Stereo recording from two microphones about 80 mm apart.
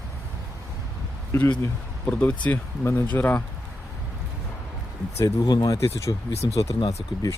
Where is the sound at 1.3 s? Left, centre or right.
Left.